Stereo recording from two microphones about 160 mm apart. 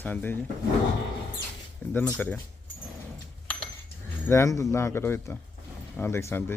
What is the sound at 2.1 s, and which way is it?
Speech, 10° left (ahead or behind).